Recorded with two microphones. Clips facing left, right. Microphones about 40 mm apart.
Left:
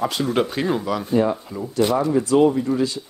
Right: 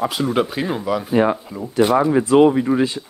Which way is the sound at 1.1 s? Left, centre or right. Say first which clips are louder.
Right 2 dB; right.